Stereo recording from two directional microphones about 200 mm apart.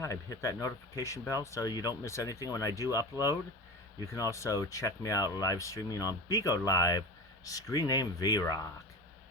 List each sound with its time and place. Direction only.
0.0 s speech: 15° left (ahead or behind)